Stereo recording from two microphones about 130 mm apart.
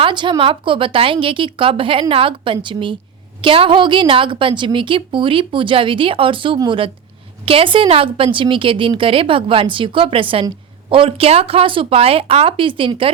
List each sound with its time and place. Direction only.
0.0 s a woman's voice: 35° right (ahead or behind)